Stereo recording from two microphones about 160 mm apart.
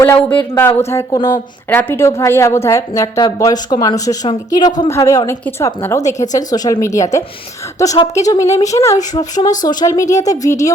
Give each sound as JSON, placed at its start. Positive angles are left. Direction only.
{"t": 0.0, "sound": "a woman's voice", "side_deg": 10}